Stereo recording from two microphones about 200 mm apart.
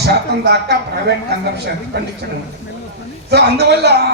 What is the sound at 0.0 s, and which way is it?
A man's voice, 55° right (ahead or behind).